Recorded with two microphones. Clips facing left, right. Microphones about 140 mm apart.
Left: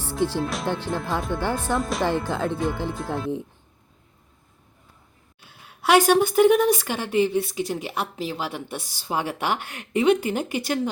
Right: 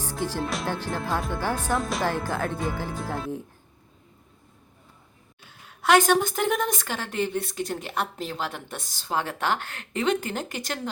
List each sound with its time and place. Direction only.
0.0 s music: 15° right (ahead or behind)
0.4 s speech: centre (ahead or behind)
2.3 s speech: 20° left (ahead or behind)
2.6 s speech: 5° right (ahead or behind)
5.5 s a woman's voice: 10° left (ahead or behind)